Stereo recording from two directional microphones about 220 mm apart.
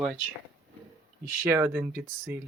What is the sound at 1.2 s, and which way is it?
Speech, 10° right (ahead or behind).